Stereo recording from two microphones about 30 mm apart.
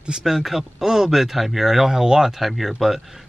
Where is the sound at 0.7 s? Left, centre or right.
Centre.